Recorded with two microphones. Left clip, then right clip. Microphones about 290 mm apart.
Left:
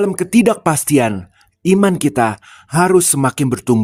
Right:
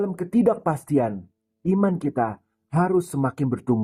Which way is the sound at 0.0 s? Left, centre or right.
Left.